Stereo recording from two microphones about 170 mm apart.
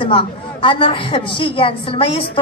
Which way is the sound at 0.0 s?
30° left (ahead or behind).